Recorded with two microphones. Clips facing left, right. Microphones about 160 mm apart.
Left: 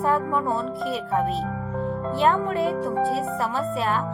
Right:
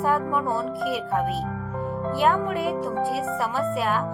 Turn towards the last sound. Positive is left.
turn(degrees=0)  # may be behind; listen again after turning